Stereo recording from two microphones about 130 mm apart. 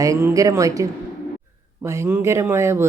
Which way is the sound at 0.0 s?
20° right (ahead or behind).